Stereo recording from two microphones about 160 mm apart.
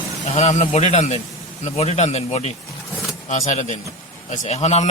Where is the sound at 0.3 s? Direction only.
45° left (ahead or behind).